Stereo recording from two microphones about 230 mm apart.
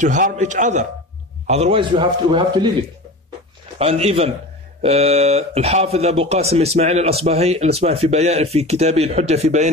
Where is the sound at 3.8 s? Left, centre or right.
Right.